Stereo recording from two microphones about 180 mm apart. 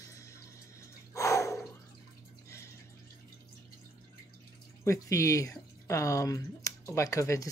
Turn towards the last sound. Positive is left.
turn(degrees=15)  # may be behind; listen again after turning